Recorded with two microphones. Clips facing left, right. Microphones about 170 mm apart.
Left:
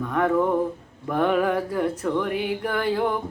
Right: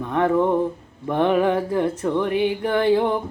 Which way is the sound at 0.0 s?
25° right (ahead or behind).